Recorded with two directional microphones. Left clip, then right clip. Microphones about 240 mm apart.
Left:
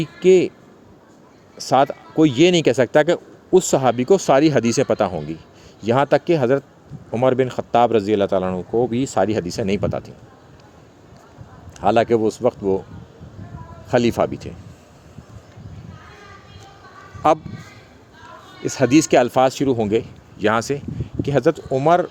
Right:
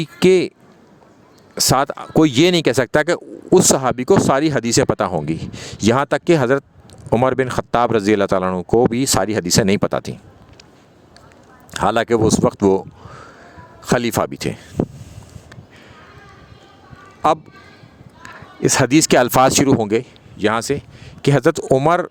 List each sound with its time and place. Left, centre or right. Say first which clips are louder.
0.0 s speech: even; right
1.5 s speech: even; right
11.7 s speech: even; right
13.8 s speech: even; right
17.2 s speech: even; centre
18.6 s speech: right 2 dB; right
20.4 s speech: right 1 dB; centre
21.0 s speech: right 2 dB; right